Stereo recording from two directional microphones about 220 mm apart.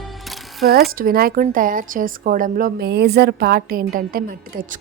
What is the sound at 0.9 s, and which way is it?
A woman's voice, 40° right (ahead or behind).